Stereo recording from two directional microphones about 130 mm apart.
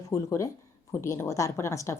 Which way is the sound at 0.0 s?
25° left (ahead or behind).